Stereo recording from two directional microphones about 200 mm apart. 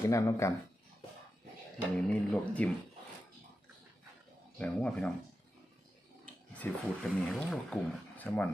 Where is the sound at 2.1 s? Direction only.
5° left (ahead or behind).